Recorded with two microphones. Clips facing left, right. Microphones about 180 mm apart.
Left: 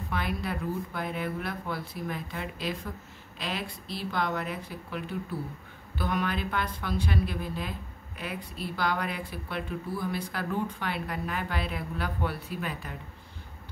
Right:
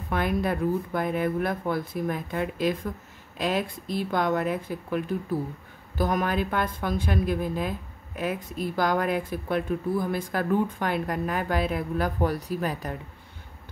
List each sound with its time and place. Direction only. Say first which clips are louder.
0.1 s speech: right 7 dB; 50° right (ahead or behind)